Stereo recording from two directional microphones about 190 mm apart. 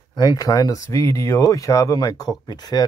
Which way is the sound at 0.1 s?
20° left (ahead or behind).